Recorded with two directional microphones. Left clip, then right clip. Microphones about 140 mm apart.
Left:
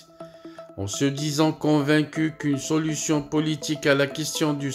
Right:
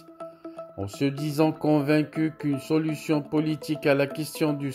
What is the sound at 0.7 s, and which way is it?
Speech, 20° right (ahead or behind).